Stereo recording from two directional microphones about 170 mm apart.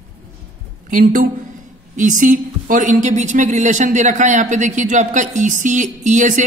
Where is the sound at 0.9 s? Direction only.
50° right (ahead or behind).